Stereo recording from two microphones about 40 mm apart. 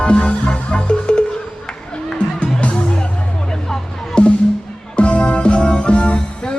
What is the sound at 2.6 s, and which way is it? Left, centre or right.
Music, left.